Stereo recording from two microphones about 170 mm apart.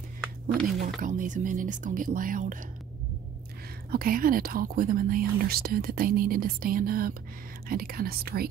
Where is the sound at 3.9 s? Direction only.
60° right (ahead or behind).